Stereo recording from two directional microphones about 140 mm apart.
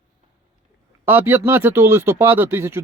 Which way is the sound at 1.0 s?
15° right (ahead or behind).